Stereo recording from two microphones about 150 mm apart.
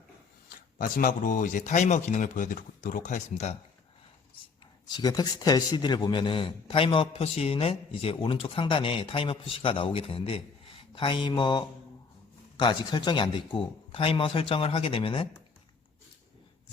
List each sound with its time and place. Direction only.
0.5 s speech: 65° left (ahead or behind); by 3.6 s 50° left (ahead or behind)
4.9 s a man's voice: 30° left (ahead or behind)